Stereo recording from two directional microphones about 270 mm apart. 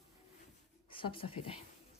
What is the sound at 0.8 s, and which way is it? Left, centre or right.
Speech, centre.